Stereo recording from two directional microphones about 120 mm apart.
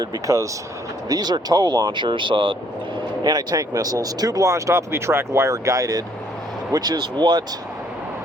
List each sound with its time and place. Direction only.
0.0 s speech: 30° right (ahead or behind); by 2.6 s 45° right (ahead or behind)
3.2 s speech: 30° right (ahead or behind)